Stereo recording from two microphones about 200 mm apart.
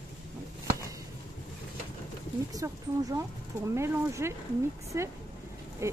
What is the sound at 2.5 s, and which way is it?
Speech, 15° right (ahead or behind).